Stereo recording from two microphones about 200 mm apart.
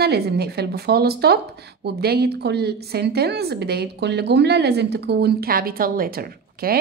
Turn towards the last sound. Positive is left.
turn(degrees=-50)  # may be behind; listen again after turning